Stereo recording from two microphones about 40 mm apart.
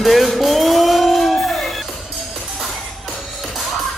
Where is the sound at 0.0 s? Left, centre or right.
Centre.